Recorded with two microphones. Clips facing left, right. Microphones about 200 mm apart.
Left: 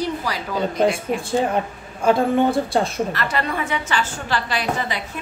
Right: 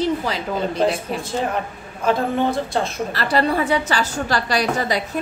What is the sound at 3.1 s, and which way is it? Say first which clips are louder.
A woman's voice: right 4 dB; 35° right (ahead or behind).